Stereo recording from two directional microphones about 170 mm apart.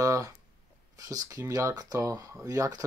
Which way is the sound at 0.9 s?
20° right (ahead or behind).